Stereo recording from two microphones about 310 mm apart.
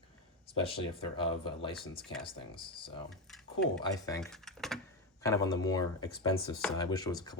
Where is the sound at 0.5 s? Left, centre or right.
Centre.